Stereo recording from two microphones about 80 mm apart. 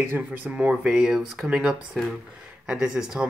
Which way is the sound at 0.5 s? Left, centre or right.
Centre.